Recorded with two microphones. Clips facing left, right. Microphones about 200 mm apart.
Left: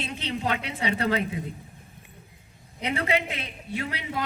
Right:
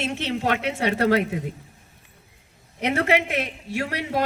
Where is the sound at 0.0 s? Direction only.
85° right.